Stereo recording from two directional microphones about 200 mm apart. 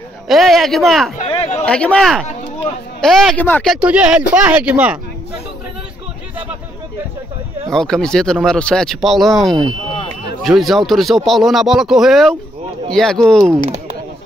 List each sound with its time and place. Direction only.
0.3 s speech: centre (ahead or behind)
1.1 s a sound: 30° left (ahead or behind)
1.7 s speech: 5° left (ahead or behind)
3.7 s speech: 5° right (ahead or behind)
7.7 s speech: 5° left (ahead or behind)